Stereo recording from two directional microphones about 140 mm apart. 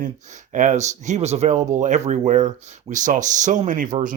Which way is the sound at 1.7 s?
60° right (ahead or behind).